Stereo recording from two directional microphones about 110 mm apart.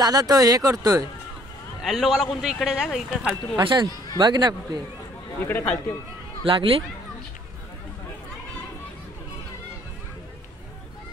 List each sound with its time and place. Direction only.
0.0 s speech: 35° right (ahead or behind)
1.8 s a man's voice: 5° right (ahead or behind)
3.5 s speech: 45° right (ahead or behind)
5.5 s a man's voice: 20° left (ahead or behind)
6.4 s speech: 55° right (ahead or behind)